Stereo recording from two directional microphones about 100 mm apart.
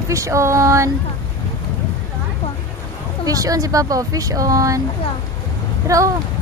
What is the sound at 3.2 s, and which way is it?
Speech, 35° right (ahead or behind).